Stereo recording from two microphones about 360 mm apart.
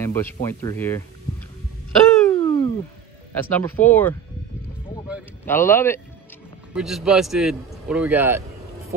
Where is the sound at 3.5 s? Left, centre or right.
Centre.